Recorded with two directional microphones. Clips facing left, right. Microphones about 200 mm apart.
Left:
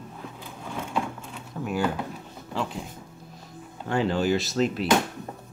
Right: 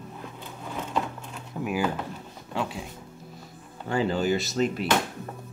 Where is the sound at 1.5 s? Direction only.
10° right (ahead or behind).